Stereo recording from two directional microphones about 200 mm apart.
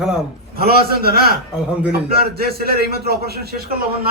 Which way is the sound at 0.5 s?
50° right (ahead or behind).